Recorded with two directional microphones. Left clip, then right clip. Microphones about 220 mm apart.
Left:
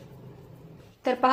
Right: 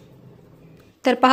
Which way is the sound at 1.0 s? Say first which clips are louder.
Right 6 dB; 50° right (ahead or behind).